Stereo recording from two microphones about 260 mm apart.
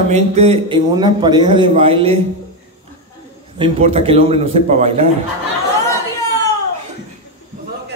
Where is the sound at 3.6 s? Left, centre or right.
Right.